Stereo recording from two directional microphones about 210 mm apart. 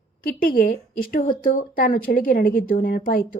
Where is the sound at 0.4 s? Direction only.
45° left (ahead or behind).